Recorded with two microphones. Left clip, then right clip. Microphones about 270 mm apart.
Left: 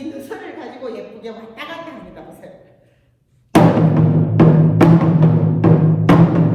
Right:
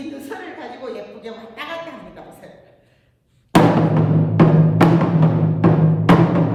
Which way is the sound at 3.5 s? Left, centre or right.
Centre.